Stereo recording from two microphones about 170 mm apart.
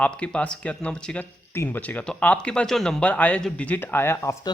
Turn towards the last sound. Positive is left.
turn(degrees=15)  # may be behind; listen again after turning